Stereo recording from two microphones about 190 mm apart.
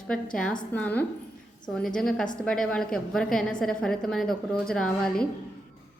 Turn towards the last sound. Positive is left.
turn(degrees=5)  # may be behind; listen again after turning